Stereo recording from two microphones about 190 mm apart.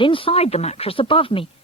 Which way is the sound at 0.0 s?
25° left (ahead or behind).